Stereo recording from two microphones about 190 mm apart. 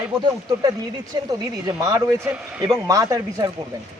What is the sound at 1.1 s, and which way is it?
Speech, 20° right (ahead or behind).